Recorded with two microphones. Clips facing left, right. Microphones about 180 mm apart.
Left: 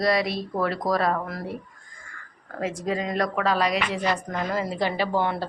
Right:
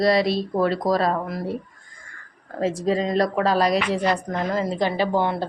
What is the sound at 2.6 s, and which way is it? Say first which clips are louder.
A woman's voice: right 5 dB; 30° right (ahead or behind).